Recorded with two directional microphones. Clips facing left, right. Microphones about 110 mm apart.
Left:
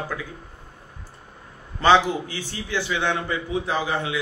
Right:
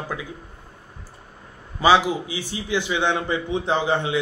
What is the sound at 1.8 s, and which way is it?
A man's voice, 10° right (ahead or behind).